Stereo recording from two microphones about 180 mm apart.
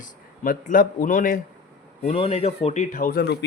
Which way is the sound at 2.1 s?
35° left (ahead or behind).